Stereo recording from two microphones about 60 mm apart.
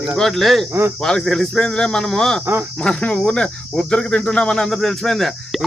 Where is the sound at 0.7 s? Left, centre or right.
Right.